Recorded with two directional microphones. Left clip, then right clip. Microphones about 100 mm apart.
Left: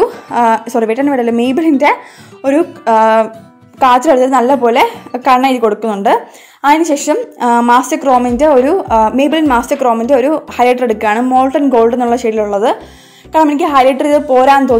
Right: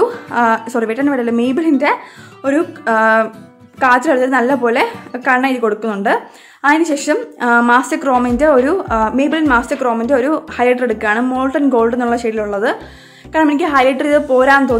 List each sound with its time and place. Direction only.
0.0 s a woman's voice: 20° left (ahead or behind)
7.9 s a woman's voice: 5° left (ahead or behind)
10.6 s speech: 30° left (ahead or behind)
11.2 s a woman's voice: 15° left (ahead or behind)